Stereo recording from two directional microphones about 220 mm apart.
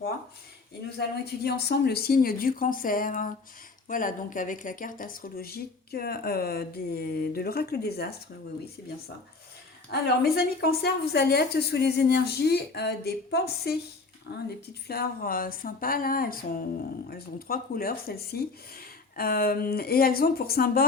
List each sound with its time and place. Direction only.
1.5 s a woman's voice: 50° left (ahead or behind)
9.9 s a woman's voice: 45° left (ahead or behind)